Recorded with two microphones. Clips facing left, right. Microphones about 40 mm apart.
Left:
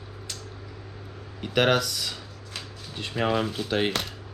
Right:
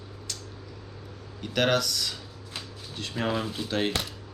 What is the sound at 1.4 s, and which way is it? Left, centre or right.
Speech, centre.